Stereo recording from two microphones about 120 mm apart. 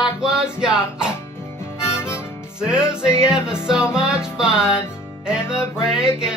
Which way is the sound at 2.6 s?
5° right (ahead or behind).